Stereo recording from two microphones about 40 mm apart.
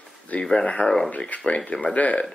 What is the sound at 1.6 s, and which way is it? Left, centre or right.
Speech, left.